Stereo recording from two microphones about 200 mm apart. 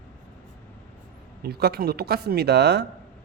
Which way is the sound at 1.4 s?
50° right (ahead or behind).